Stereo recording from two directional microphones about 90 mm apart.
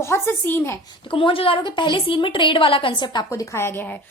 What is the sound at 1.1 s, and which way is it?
A woman's voice, 80° left.